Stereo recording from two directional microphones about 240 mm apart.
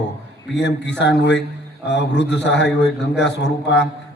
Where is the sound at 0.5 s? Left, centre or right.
Left.